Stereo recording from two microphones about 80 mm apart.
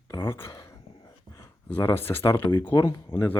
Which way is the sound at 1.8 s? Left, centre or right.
Left.